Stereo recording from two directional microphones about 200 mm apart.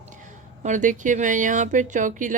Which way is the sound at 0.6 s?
40° right (ahead or behind).